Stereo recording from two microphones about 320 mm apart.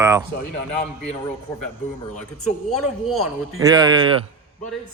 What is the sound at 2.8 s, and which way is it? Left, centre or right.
Speech, left.